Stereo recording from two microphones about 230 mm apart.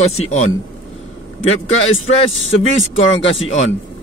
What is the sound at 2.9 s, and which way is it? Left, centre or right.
Speech, left.